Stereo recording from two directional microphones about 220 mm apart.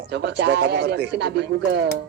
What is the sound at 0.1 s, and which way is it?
A man's voice, 50° right (ahead or behind).